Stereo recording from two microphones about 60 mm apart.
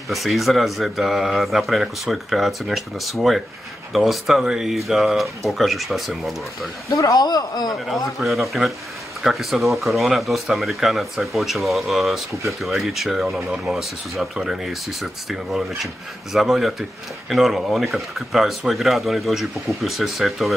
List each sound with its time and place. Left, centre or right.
0.1 s speech: centre
6.9 s speech: left
7.7 s speech: centre